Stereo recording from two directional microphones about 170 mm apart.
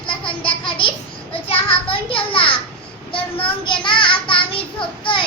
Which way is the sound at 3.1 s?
30° left (ahead or behind).